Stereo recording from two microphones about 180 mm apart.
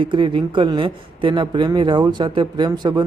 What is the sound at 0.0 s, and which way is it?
Speech, 25° right (ahead or behind).